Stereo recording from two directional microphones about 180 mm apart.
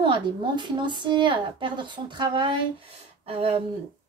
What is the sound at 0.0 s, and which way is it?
A woman's voice, 25° right (ahead or behind).